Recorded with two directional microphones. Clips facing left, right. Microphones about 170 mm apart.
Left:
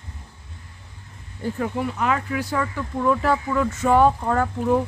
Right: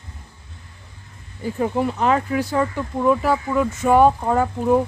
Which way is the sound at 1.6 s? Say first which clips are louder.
Right 5 dB; 30° right (ahead or behind).